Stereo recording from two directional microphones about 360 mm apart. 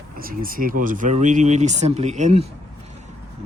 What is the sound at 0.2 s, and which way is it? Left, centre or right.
Speech, right.